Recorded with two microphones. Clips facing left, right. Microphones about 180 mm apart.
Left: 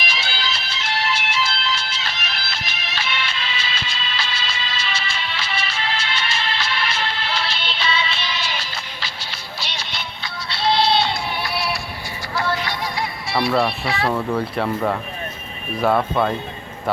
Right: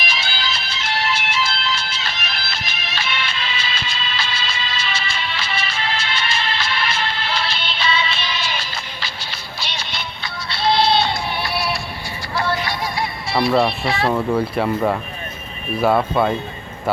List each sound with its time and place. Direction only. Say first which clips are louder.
0.0 s music: right 1 dB; 50° right (ahead or behind)
10.5 s music: right 1 dB; 50° right (ahead or behind)
12.3 s music: right 1 dB; 35° right (ahead or behind)
13.5 s speech: right 3 dB; 15° right (ahead or behind)
13.8 s speech: right 2 dB; 35° right (ahead or behind)
14.1 s speech: right 3 dB; 10° right (ahead or behind)